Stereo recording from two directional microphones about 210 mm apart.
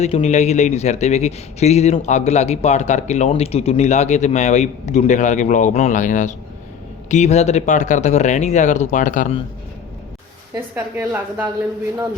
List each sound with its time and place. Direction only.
0.0 s speech: 30° left (ahead or behind)
10.9 s speech: 10° right (ahead or behind)